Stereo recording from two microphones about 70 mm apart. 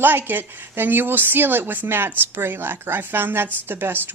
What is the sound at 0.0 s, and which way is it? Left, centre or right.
A woman's voice, right.